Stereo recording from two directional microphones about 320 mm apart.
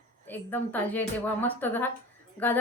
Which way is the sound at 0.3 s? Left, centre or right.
Centre.